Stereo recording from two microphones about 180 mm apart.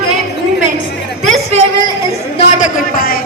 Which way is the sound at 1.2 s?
40° right (ahead or behind).